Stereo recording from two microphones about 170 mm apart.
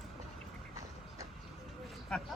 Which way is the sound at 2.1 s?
5° left (ahead or behind).